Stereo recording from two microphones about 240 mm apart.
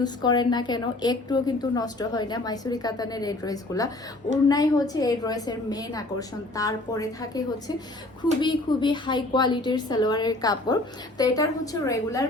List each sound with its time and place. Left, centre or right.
0.0 s a woman's voice: centre